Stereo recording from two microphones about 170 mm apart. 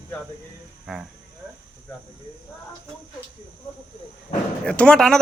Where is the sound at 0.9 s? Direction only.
Centre (ahead or behind).